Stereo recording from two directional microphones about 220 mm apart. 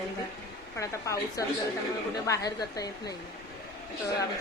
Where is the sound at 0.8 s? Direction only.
15° left (ahead or behind).